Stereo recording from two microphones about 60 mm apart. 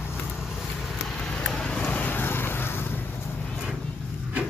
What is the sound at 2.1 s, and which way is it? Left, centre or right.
Vehicle, left.